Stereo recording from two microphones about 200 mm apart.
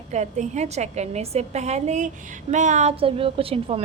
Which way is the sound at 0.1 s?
35° right (ahead or behind).